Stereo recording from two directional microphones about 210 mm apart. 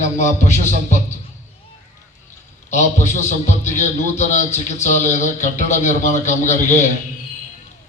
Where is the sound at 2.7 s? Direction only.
35° left (ahead or behind).